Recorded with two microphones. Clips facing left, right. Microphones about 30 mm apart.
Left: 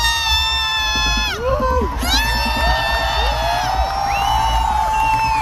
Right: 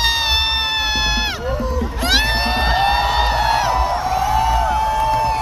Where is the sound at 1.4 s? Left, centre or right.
Left.